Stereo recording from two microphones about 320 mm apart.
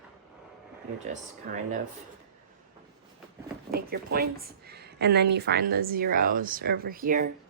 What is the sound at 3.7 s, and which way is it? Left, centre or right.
A woman's voice, right.